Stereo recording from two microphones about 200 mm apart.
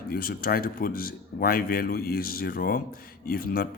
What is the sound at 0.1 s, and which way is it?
Speech, 50° left (ahead or behind).